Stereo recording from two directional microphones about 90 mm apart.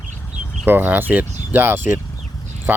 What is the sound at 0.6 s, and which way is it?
Speech, 20° right (ahead or behind).